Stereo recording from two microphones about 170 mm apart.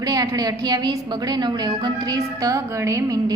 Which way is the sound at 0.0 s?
20° right (ahead or behind).